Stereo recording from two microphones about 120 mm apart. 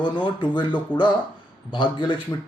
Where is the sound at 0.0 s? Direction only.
40° left (ahead or behind).